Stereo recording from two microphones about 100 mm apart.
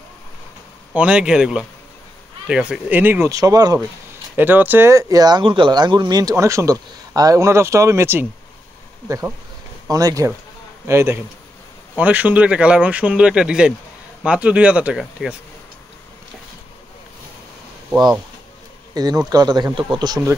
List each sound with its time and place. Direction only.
0.9 s speech: 10° right (ahead or behind)
3.3 s speech: 35° right (ahead or behind)
4.4 s speech: 20° right (ahead or behind); by 5.4 s 40° right (ahead or behind)
5.4 s speech: 55° right (ahead or behind)
6.3 s speech: 30° right (ahead or behind)
9.8 s speech: 35° right (ahead or behind)
10.9 s speech: 25° right (ahead or behind)
12.0 s speech: 15° right (ahead or behind)
18.9 s speech: 40° right (ahead or behind)